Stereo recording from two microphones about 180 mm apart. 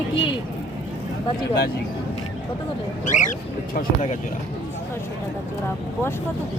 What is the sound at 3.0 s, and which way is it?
Speech, 45° left (ahead or behind).